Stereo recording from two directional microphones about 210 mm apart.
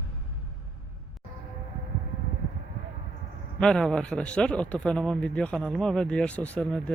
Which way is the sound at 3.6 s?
5° left (ahead or behind).